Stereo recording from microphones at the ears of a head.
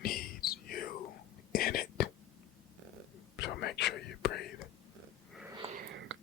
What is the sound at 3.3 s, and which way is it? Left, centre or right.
Whispering, left.